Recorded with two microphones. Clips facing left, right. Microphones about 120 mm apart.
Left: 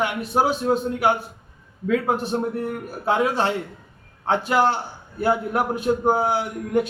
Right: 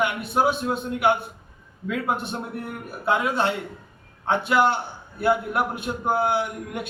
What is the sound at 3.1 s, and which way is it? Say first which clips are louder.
A man's voice: left 2 dB; 35° left (ahead or behind).